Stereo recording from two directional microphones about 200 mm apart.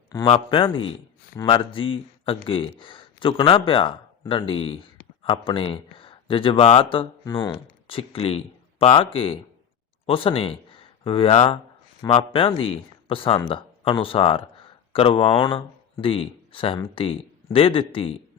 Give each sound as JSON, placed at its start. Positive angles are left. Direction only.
{"t": 0.3, "sound": "speech", "side_deg": 25}